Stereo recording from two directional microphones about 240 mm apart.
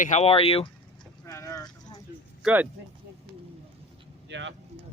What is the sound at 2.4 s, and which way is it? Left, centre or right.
Speech, centre.